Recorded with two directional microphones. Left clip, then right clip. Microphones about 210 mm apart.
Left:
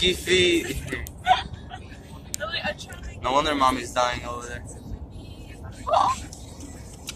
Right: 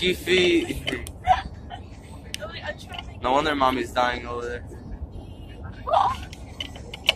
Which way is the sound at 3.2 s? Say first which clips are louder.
Even; 5° right (ahead or behind).